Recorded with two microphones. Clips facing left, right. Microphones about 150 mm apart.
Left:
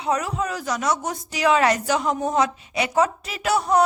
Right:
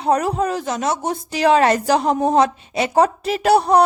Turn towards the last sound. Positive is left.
turn(degrees=-35)  # may be behind; listen again after turning